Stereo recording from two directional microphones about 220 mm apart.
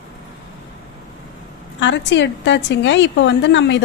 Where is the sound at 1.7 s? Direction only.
55° left (ahead or behind).